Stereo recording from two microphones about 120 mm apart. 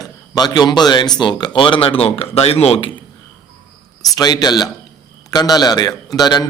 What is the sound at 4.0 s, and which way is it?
A man's voice, 35° left (ahead or behind).